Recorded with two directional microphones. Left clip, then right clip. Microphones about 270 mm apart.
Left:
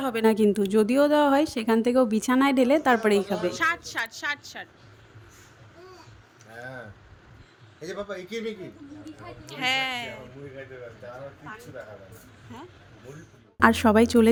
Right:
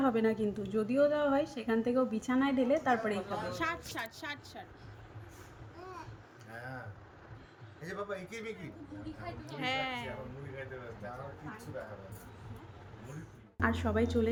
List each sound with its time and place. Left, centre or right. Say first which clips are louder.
0.0 s a woman's voice: left 8 dB; left
3.6 s a woman's voice: left 10 dB; centre
7.9 s a man's voice: left 6 dB; left
9.5 s a woman's voice: left 10 dB; centre
13.6 s a woman's voice: left 13 dB; left